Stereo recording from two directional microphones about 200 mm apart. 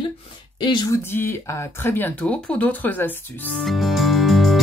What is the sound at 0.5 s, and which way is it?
Speech, 20° left (ahead or behind).